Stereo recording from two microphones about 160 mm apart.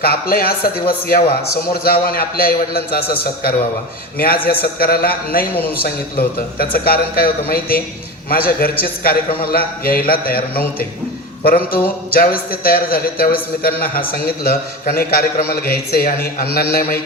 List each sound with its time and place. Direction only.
0.0 s a man's voice: 70° left (ahead or behind)
4.6 s a man's voice: 70° left (ahead or behind)